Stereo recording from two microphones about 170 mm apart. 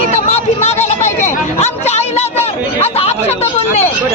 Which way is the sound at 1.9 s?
40° left (ahead or behind).